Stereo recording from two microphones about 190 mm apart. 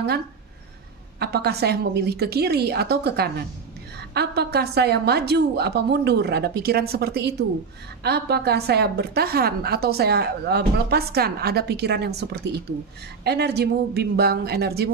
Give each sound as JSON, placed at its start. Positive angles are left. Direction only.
{"t": 1.2, "sound": "a woman's voice", "side_deg": -60}